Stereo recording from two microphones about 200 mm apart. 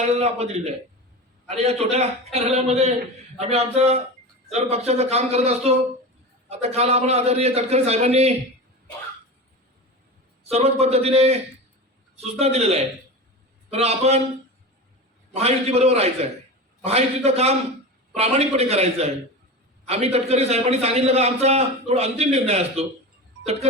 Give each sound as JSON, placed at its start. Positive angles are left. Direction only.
{"t": 0.1, "sound": "a man's voice", "side_deg": -30}
{"t": 10.4, "sound": "a man's voice", "side_deg": -30}
{"t": 15.4, "sound": "a man's voice", "side_deg": -30}